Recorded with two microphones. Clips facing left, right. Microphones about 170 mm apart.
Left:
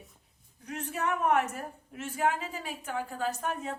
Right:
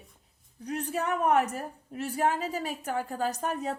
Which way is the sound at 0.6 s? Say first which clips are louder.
Right 3 dB; 35° right (ahead or behind).